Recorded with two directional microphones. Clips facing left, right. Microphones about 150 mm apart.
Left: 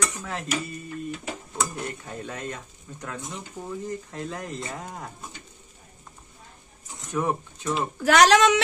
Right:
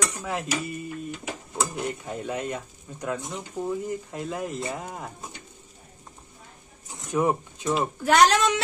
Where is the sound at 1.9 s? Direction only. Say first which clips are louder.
Right 4 dB; 10° right (ahead or behind).